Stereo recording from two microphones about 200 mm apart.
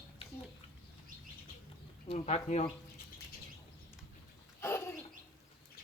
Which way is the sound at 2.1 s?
30° left (ahead or behind).